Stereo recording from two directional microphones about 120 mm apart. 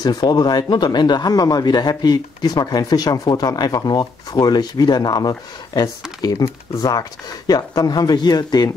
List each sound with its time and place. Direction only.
0.0 s speech: 35° left (ahead or behind)